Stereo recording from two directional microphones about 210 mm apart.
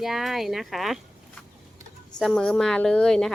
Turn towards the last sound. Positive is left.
turn(degrees=5)  # may be behind; listen again after turning